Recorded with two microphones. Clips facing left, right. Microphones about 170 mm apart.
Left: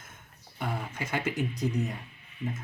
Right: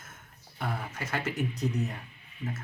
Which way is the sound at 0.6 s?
15° left (ahead or behind).